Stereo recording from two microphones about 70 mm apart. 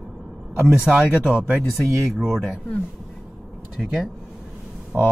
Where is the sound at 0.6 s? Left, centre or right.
Centre.